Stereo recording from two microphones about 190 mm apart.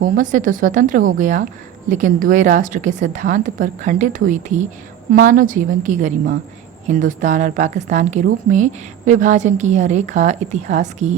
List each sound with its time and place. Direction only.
0.0 s a woman's voice: 45° right (ahead or behind)